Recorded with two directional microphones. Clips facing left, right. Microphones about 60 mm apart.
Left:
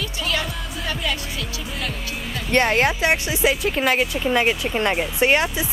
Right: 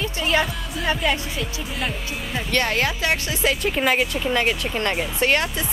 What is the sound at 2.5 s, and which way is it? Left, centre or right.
Speech, left.